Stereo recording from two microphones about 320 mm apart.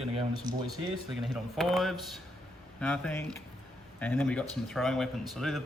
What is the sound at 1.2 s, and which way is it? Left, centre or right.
Speech, centre.